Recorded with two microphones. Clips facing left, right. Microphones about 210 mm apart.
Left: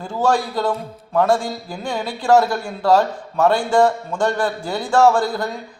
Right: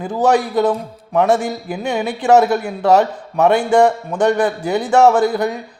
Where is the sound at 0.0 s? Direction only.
20° right (ahead or behind).